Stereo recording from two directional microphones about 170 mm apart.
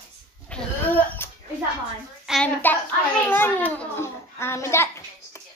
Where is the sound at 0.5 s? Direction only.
10° left (ahead or behind).